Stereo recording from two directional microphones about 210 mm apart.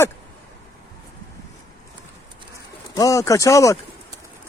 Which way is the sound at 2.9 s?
15° left (ahead or behind).